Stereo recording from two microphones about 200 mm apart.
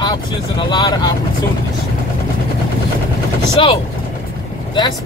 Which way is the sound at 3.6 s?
25° left (ahead or behind).